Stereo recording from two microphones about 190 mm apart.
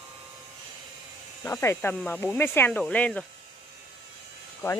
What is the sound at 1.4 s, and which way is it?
A woman's voice, 10° left (ahead or behind).